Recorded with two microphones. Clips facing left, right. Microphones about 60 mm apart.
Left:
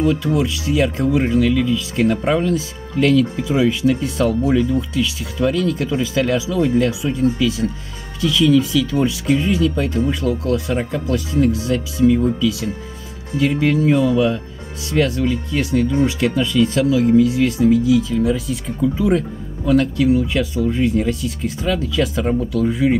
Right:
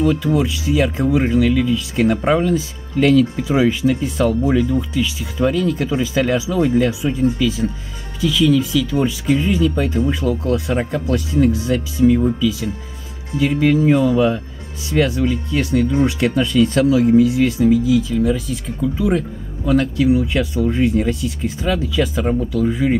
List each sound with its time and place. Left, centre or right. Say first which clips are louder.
0.0 s speech: right 1 dB; centre; by 3.7 s right
3.8 s speech: even; centre; by 6.6 s right
6.6 s speech: right 1 dB; centre
12.3 s speech: even; centre
14.1 s speech: right 1 dB; centre
14.9 s speech: right 1 dB; centre
16.5 s speech: right 1 dB; centre
17.0 s speech: right 1 dB; centre
17.6 s speech: left 2 dB; centre